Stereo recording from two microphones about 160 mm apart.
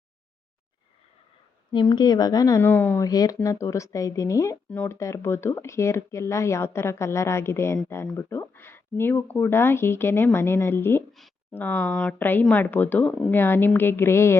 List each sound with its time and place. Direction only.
1.7 s a woman's voice: 30° left (ahead or behind)